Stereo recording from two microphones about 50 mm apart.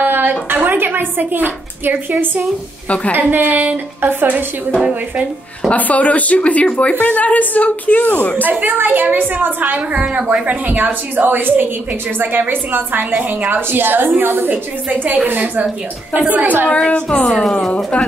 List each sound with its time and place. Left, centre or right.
0.0 s a sound: right
0.7 s a woman's voice: right
4.7 s a woman's voice: right
5.7 s a woman's voice: left
8.4 s a woman's voice: right
16.7 s a woman's voice: left